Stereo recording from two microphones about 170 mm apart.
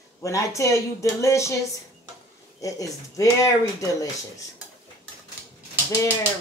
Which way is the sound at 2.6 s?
20° left (ahead or behind).